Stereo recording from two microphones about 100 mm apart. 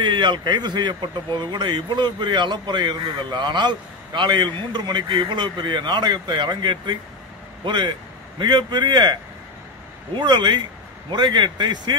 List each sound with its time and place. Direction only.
0.0 s speech: 55° right (ahead or behind)